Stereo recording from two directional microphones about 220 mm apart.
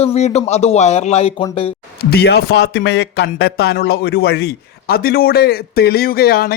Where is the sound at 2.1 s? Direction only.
45° left (ahead or behind).